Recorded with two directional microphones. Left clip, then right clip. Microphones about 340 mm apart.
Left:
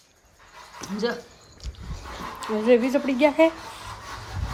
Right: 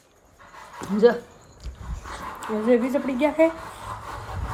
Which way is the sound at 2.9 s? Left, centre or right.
Centre.